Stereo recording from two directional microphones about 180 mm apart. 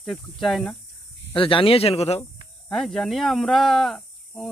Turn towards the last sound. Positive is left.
turn(degrees=0)  # may be behind; listen again after turning